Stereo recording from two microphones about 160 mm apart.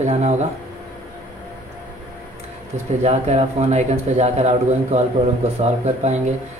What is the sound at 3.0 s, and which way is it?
A man's voice, 45° right (ahead or behind).